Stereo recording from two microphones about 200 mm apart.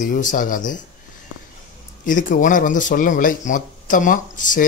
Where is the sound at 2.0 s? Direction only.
40° left (ahead or behind).